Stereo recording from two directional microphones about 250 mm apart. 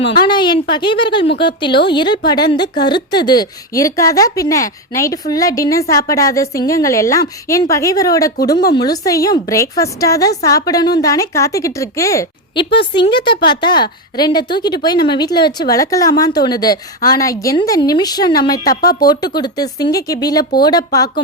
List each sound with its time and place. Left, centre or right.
0.0 s a woman's voice: centre